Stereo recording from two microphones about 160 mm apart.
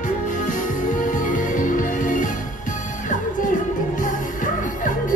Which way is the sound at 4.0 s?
55° left (ahead or behind).